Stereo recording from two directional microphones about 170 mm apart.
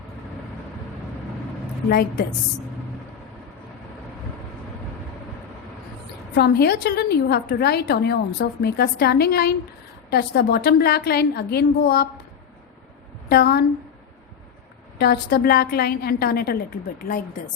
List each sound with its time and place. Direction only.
1.9 s a woman's voice: 70° left (ahead or behind)
6.3 s a woman's voice: 70° left (ahead or behind)
13.2 s a woman's voice: 70° left (ahead or behind)
14.9 s a woman's voice: 65° left (ahead or behind)
17.0 s speech: 55° left (ahead or behind)